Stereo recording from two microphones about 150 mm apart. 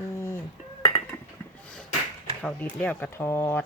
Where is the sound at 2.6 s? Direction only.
10° left (ahead or behind).